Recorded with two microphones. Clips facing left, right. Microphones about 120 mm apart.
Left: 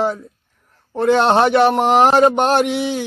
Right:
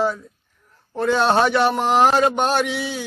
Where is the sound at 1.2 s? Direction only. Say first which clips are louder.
Left 3 dB; 20° left (ahead or behind).